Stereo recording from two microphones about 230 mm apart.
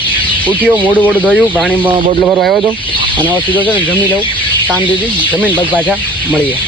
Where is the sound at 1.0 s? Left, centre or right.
Centre.